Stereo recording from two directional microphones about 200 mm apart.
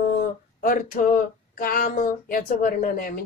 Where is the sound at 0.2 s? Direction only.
45° left (ahead or behind).